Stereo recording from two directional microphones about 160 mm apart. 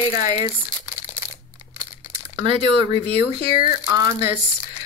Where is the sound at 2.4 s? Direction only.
30° right (ahead or behind).